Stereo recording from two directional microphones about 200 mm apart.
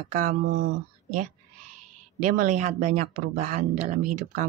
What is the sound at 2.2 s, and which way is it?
Speech, 40° right (ahead or behind).